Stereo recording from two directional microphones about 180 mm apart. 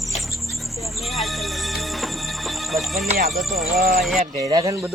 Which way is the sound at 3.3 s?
Centre (ahead or behind).